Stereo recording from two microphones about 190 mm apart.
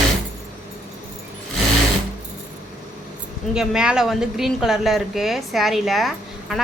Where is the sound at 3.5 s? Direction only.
5° right (ahead or behind).